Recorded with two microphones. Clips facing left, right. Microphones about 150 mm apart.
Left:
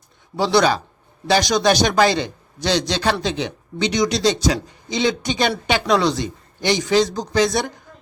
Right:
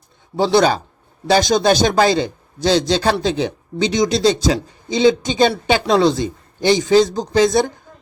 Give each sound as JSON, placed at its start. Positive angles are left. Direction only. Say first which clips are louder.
{"t": 0.3, "sound": "a man's voice", "louder": "right 3 dB", "side_deg": -25}